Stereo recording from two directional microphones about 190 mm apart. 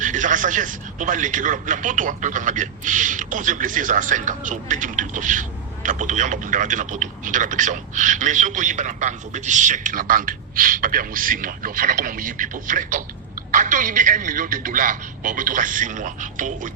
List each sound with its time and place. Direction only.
0.0 s a man's voice: 40° right (ahead or behind)